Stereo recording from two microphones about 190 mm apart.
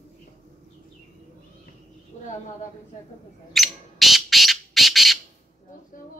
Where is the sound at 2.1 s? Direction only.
40° left (ahead or behind).